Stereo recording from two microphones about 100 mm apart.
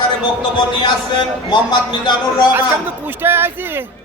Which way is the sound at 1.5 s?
50° left (ahead or behind).